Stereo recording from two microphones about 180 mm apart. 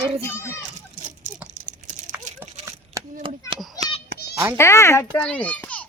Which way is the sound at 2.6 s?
20° right (ahead or behind).